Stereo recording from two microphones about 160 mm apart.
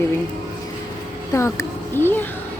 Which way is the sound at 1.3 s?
15° left (ahead or behind).